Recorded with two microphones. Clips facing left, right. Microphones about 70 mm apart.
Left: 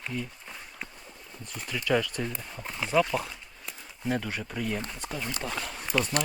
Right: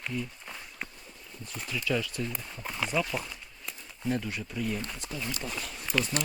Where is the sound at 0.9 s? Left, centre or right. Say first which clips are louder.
Left 2 dB; left.